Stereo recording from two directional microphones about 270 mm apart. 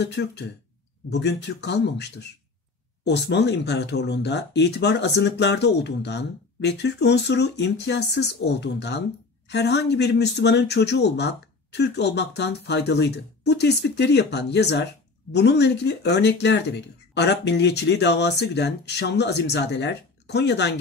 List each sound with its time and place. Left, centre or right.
0.0 s speech: left